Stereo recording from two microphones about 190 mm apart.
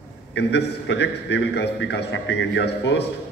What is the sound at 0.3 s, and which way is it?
A man's voice, 65° left (ahead or behind).